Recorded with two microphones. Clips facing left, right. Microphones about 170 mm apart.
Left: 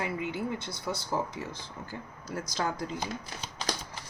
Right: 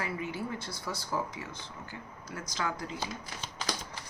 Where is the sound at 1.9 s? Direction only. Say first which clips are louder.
Left 6 dB; 35° left (ahead or behind).